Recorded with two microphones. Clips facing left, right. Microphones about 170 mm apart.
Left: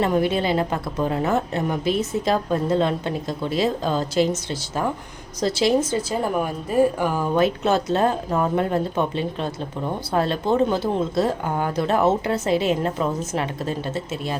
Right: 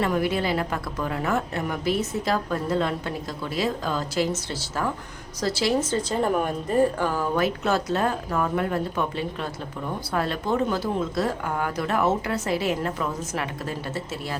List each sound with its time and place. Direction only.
0.0 s speech: 25° left (ahead or behind)
5.4 s speech: 20° left (ahead or behind)